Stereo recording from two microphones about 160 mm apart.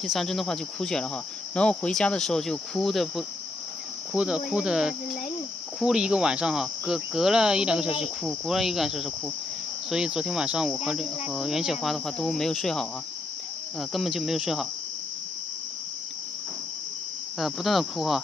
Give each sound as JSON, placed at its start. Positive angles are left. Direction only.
{"t": 0.0, "sound": "speech", "side_deg": 0}
{"t": 17.4, "sound": "speech", "side_deg": 0}